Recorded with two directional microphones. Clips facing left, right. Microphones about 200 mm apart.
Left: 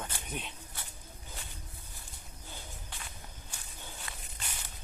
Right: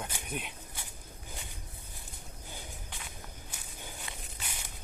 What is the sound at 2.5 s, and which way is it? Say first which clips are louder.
Walk: right 1 dB; 15° right (ahead or behind).